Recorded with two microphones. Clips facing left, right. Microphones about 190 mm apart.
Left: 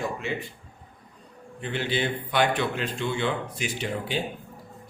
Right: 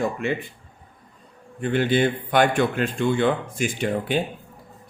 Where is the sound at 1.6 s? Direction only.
50° right (ahead or behind).